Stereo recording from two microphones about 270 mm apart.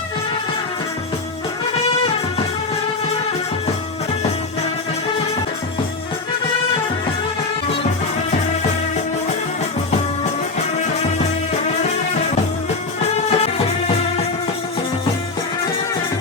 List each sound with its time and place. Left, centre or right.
13.1 s music: left